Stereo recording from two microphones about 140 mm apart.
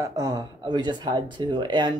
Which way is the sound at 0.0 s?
25° right (ahead or behind).